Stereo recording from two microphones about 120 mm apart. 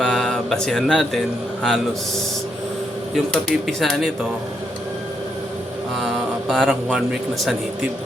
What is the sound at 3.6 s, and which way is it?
Speech, centre (ahead or behind).